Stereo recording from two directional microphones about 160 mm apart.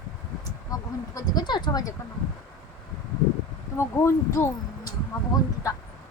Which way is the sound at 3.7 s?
15° left (ahead or behind).